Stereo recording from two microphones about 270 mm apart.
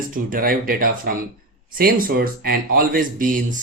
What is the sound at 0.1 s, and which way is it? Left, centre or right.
Speech, right.